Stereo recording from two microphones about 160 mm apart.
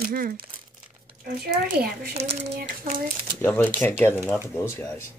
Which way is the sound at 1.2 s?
80° right.